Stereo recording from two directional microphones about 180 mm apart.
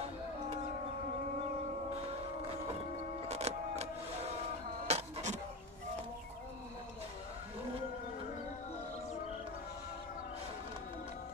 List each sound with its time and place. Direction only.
3.3 s music: 35° right (ahead or behind)
4.8 s printer: 35° right (ahead or behind)